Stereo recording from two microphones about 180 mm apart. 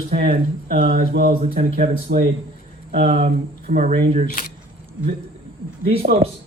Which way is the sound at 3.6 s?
45° right (ahead or behind).